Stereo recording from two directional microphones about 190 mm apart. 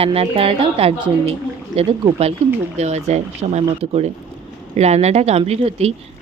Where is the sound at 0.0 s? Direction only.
30° right (ahead or behind).